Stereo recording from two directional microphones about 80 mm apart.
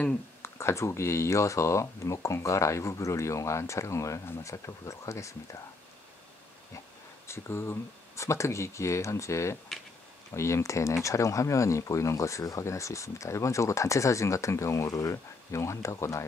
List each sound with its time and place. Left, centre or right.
0.4 s speech: left
7.2 s speech: left